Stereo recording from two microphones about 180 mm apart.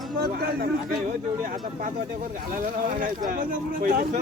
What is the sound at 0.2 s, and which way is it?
Speech, 60° right (ahead or behind).